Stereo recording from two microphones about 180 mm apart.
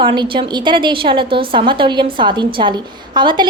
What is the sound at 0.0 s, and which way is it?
A woman's voice, 25° right (ahead or behind).